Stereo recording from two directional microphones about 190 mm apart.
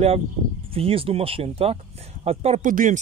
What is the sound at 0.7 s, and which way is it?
Speech, 30° right (ahead or behind).